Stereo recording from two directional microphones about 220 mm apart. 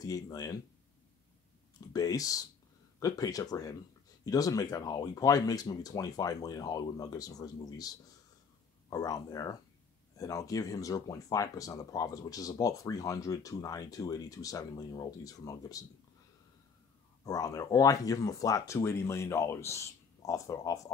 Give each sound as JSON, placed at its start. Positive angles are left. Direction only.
{"t": 0.0, "sound": "speech", "side_deg": 15}
{"t": 1.9, "sound": "speech", "side_deg": 15}
{"t": 17.2, "sound": "speech", "side_deg": 15}